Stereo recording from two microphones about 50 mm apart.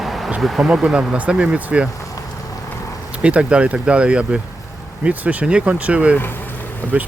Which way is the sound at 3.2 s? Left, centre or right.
Right.